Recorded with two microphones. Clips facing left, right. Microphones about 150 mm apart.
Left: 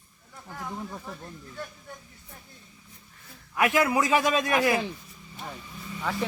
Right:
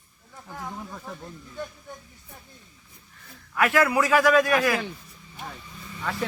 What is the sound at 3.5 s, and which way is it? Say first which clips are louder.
Speech: right 2 dB; 20° left (ahead or behind).